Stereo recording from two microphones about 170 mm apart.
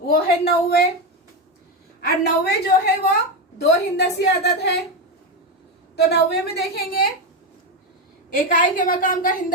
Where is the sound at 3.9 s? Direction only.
85° left.